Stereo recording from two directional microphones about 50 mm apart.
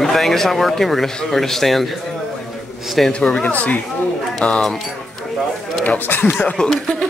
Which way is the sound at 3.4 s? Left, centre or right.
Left.